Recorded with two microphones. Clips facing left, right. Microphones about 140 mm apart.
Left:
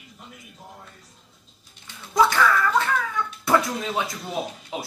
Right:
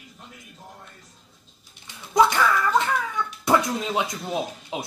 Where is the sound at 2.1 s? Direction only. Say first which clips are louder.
Right 1 dB; 20° right (ahead or behind).